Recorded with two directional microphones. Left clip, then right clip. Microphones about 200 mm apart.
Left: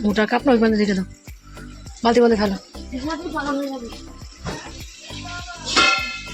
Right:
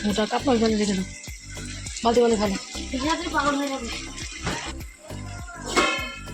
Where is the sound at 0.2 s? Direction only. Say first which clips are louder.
Left 5 dB; 45° left (ahead or behind).